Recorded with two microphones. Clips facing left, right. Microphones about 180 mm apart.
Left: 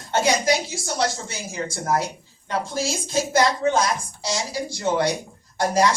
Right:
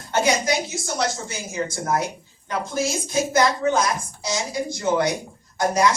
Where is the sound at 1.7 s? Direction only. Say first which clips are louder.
Left 2 dB; 30° left (ahead or behind).